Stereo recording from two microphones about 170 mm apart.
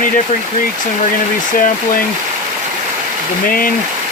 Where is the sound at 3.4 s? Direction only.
55° left (ahead or behind).